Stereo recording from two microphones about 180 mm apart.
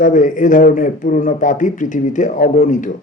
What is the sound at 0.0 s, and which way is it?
A man's voice, 45° left (ahead or behind).